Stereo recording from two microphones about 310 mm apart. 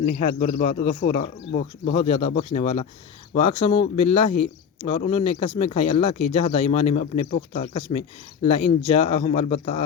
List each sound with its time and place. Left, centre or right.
0.0 s speech: left
1.0 s speech: left
1.9 s speech: centre